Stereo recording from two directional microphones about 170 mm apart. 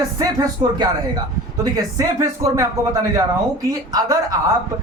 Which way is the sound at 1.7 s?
20° right (ahead or behind).